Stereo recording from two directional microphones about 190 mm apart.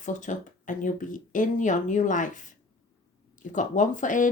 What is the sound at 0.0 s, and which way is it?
Speech, 40° left (ahead or behind).